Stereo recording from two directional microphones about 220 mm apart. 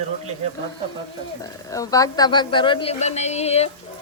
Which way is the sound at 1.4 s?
15° left (ahead or behind).